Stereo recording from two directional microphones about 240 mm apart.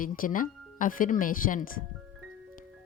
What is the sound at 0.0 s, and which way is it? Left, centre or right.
Speech, left.